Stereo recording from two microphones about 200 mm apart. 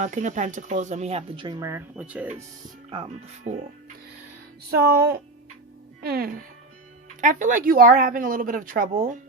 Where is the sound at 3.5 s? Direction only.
35° right (ahead or behind).